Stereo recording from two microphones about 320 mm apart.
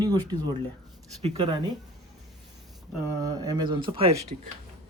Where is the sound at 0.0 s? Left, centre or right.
Centre.